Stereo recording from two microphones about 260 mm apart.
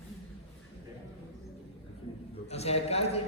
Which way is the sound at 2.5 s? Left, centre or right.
Left.